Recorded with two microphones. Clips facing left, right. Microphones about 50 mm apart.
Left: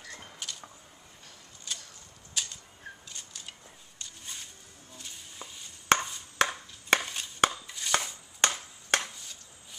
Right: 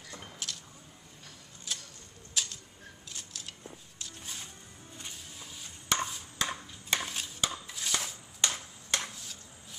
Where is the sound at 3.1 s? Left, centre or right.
Centre.